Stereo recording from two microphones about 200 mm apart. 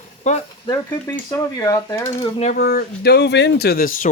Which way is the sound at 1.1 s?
15° left (ahead or behind).